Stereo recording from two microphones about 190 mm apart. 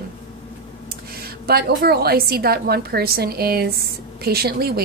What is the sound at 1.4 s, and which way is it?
A woman's voice, 55° right (ahead or behind).